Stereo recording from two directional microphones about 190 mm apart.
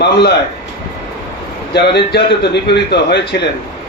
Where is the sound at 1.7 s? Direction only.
60° left (ahead or behind).